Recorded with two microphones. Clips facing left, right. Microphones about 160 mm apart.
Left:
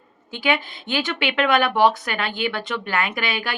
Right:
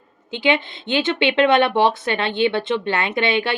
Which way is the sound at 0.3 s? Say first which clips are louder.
Right 3 dB; 20° right (ahead or behind).